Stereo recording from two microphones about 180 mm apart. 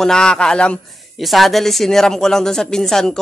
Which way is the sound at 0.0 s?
5° left (ahead or behind).